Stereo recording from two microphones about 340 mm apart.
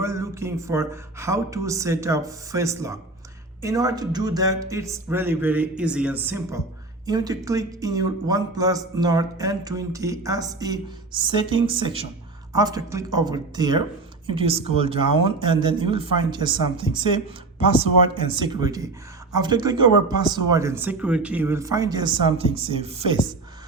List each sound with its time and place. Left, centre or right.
0.0 s speech: centre
18.2 s speech: centre